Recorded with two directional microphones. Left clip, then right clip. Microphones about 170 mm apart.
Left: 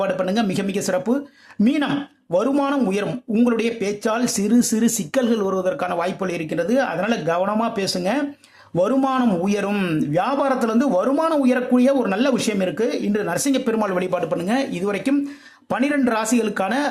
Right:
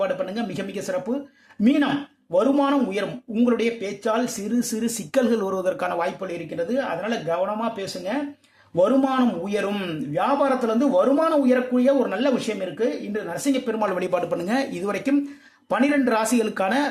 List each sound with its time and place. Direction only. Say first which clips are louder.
0.0 s a man's voice: left 4 dB; 30° left (ahead or behind)
5.1 s speech: even; 10° left (ahead or behind)
6.1 s a man's voice: left 4 dB; 30° left (ahead or behind)
13.8 s speech: left 1 dB; 15° left (ahead or behind)